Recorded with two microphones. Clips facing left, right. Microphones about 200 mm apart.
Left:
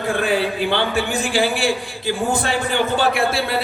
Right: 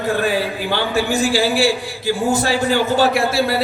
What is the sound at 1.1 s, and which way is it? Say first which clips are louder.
A man's voice: right 3 dB; 55° left (ahead or behind).